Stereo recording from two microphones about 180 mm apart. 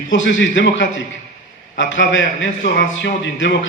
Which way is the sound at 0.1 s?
90° left.